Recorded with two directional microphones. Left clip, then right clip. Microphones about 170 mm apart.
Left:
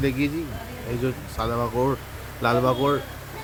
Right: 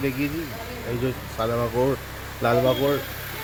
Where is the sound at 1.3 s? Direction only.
5° right (ahead or behind).